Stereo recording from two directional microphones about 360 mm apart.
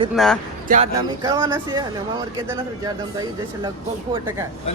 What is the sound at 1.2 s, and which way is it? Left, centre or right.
A man's voice, centre.